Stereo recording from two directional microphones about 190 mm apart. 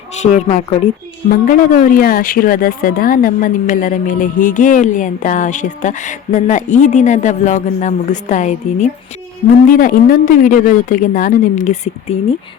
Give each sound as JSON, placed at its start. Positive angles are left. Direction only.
{"t": 0.1, "sound": "a woman's voice", "side_deg": 35}